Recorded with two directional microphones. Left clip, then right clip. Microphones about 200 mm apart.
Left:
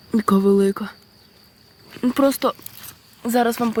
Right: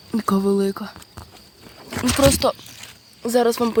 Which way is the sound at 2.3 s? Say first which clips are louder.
Right 2 dB; centre (ahead or behind).